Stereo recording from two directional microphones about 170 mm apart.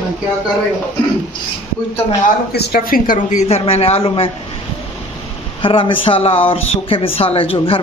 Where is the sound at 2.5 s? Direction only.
65° left (ahead or behind); by 4.3 s 35° left (ahead or behind).